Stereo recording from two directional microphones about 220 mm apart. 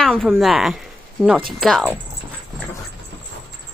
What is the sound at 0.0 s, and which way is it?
Speech, centre (ahead or behind).